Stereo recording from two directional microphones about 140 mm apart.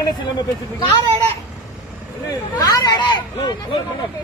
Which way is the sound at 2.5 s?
30° left (ahead or behind).